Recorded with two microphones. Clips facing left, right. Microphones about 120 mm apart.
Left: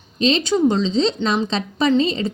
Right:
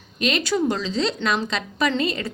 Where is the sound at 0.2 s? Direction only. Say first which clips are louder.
Left 5 dB; 25° left (ahead or behind).